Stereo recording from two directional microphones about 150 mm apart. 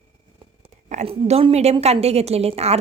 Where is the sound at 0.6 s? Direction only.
50° right (ahead or behind).